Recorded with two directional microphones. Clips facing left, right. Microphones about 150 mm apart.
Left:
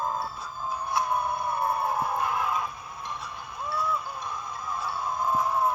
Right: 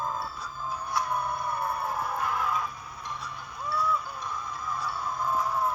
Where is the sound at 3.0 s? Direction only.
50° left (ahead or behind).